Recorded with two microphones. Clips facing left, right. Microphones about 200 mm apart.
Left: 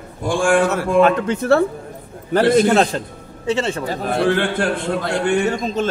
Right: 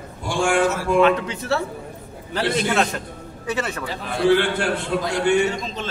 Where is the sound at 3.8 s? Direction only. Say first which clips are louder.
Right 1 dB; 45° left (ahead or behind).